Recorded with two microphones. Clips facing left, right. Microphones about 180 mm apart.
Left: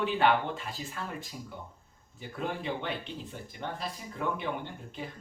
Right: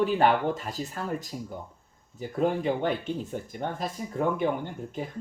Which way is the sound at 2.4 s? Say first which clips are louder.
Right 9 dB; 45° right (ahead or behind).